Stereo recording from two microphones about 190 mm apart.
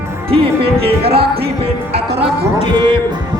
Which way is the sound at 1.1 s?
55° right (ahead or behind).